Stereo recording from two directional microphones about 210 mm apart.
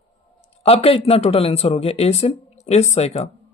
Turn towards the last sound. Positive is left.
turn(degrees=30)  # may be behind; listen again after turning